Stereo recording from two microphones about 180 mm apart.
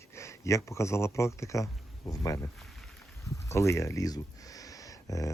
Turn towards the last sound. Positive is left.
turn(degrees=20)  # may be behind; listen again after turning